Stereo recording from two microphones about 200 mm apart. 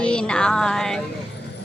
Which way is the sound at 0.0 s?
5° left (ahead or behind).